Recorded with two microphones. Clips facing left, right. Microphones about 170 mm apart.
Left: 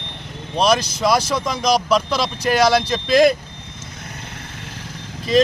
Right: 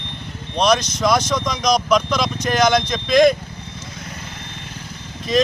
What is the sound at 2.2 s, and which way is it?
Speech, 30° left (ahead or behind).